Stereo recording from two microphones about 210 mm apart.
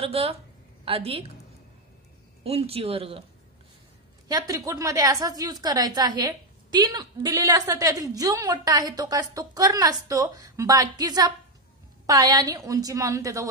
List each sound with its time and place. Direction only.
0.0 s speech: 25° right (ahead or behind)
2.4 s speech: 30° right (ahead or behind)
4.3 s a woman's voice: 15° right (ahead or behind)